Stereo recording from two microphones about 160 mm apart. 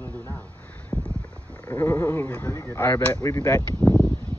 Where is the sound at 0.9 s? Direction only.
5° left (ahead or behind).